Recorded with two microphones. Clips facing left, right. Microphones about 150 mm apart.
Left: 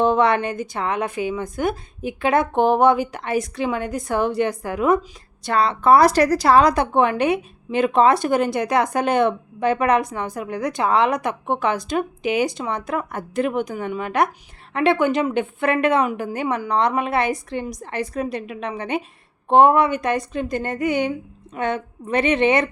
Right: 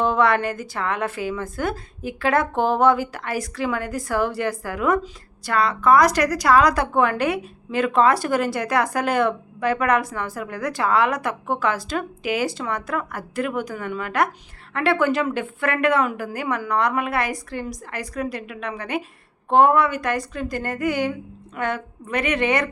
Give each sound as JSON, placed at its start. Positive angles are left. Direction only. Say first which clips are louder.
{"t": 0.0, "sound": "a woman's voice", "louder": "left 2 dB", "side_deg": 20}